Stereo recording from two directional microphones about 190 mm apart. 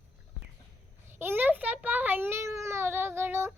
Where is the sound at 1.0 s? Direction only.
10° right (ahead or behind).